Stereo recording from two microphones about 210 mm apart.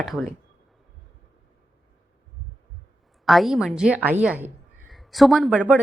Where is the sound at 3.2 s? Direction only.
Centre (ahead or behind).